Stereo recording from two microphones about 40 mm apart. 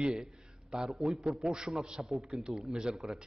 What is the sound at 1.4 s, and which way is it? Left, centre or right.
Speech, centre.